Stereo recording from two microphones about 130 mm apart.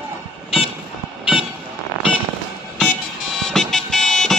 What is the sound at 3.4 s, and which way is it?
Music, 5° left (ahead or behind).